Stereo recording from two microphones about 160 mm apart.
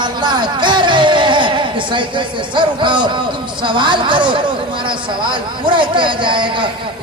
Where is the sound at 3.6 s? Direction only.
30° right (ahead or behind).